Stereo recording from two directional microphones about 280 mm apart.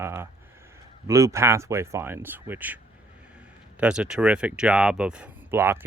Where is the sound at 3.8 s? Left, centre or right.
Centre.